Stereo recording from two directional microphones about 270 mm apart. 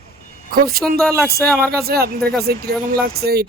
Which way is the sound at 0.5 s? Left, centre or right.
Right.